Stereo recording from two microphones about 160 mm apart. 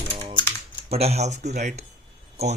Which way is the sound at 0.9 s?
40° right (ahead or behind).